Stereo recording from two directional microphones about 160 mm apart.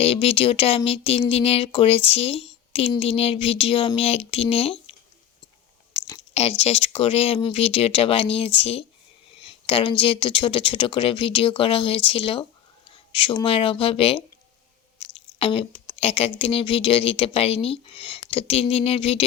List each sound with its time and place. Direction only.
0.0 s speech: 35° left (ahead or behind)
6.7 s speech: 40° left (ahead or behind)
15.1 s a sound: 35° left (ahead or behind)
16.4 s speech: 35° left (ahead or behind)